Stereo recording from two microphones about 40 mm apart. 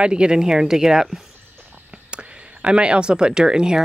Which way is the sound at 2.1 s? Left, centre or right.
Right.